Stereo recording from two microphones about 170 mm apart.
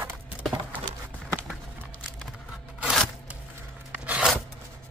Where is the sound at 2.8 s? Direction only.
5° right (ahead or behind).